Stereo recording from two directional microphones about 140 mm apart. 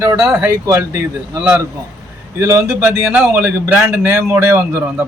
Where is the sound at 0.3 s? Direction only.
5° right (ahead or behind).